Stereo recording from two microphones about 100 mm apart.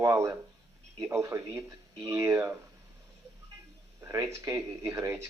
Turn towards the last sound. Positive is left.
turn(degrees=-30)  # may be behind; listen again after turning